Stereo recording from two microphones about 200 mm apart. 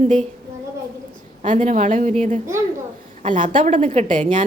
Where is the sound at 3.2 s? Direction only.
40° right (ahead or behind).